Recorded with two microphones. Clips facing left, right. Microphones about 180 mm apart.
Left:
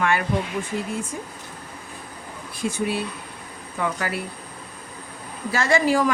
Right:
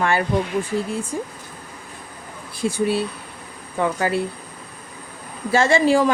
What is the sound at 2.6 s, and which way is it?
Speech, 30° right (ahead or behind).